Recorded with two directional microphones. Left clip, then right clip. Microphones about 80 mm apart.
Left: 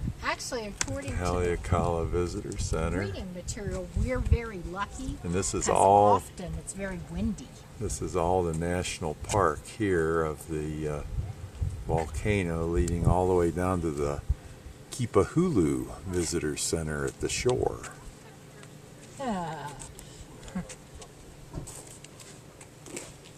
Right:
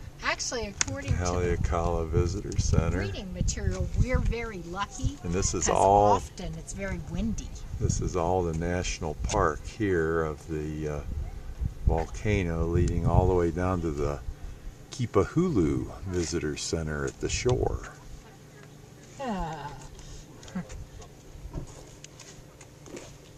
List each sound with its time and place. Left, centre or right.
0.2 s speech: right
1.4 s speech: centre
3.0 s speech: right
5.2 s speech: centre
6.1 s speech: right
7.9 s speech: centre
12.0 s speech: centre
19.2 s a sound: centre